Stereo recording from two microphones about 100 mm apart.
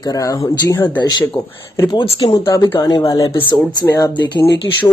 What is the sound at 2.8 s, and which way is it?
Speech, 40° left (ahead or behind).